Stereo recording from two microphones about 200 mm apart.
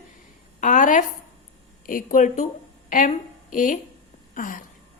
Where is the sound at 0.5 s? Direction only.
40° left (ahead or behind).